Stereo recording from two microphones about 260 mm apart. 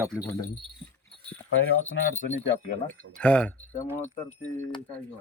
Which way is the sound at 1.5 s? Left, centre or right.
Left.